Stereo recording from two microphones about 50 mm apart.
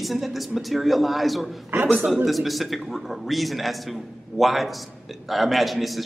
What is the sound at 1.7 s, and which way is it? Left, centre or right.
Speech, right.